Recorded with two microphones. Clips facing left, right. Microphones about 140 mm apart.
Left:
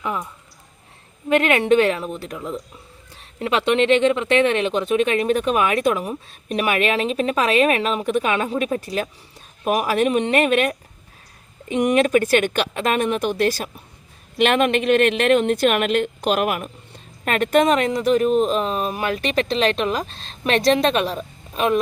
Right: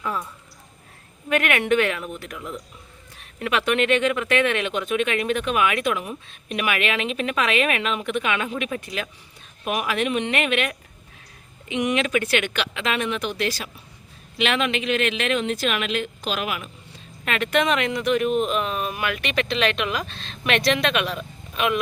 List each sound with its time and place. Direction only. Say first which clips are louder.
0.0 s a woman's voice: left 2 dB; 20° left (ahead or behind)
1.3 s a woman's voice: left 5 dB; 25° left (ahead or behind)